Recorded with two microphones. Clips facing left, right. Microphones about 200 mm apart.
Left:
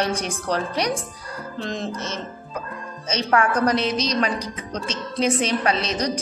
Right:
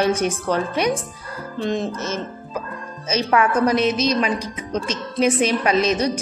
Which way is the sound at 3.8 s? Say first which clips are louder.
Right 3 dB; 5° right (ahead or behind).